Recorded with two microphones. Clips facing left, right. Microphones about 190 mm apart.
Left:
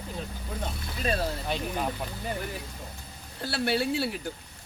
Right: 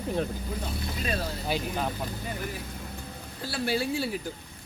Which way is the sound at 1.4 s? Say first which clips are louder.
Right 1 dB; 5° right (ahead or behind).